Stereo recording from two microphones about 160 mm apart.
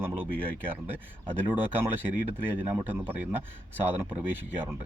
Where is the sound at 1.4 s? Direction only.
15° right (ahead or behind).